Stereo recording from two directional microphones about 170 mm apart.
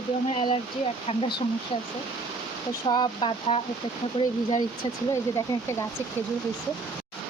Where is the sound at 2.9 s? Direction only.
25° left (ahead or behind).